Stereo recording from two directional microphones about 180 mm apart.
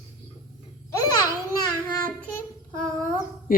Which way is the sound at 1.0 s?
20° left (ahead or behind).